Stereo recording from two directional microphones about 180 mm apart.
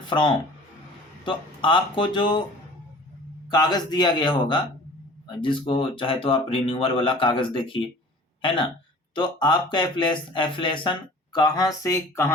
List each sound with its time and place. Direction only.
0.0 s speech: 25° left (ahead or behind)
3.5 s speech: 20° left (ahead or behind)